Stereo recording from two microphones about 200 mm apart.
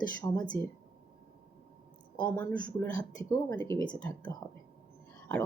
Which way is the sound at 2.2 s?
10° left (ahead or behind).